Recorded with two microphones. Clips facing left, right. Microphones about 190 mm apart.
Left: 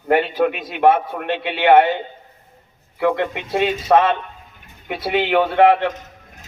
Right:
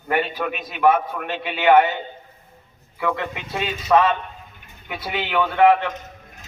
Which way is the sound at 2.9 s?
65° left (ahead or behind).